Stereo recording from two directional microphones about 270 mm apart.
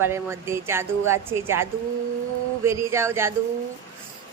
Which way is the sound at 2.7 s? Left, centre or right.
Centre.